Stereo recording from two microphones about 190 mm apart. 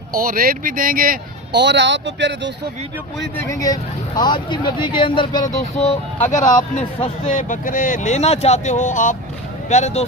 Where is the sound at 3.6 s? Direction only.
20° left (ahead or behind).